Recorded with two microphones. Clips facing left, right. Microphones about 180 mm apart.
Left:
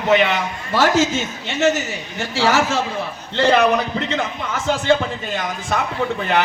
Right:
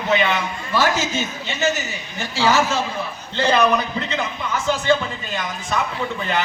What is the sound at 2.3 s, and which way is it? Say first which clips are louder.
A man's voice: left 1 dB; 80° left.